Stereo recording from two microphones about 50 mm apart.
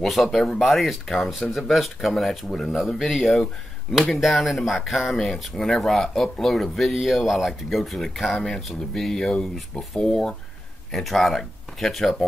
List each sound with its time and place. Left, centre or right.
0.0 s speech: centre
8.4 s speech: centre